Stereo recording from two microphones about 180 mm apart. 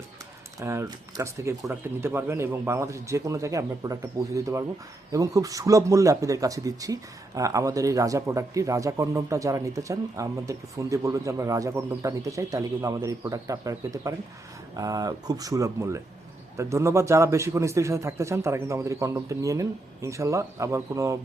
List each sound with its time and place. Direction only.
0.6 s speech: 15° right (ahead or behind)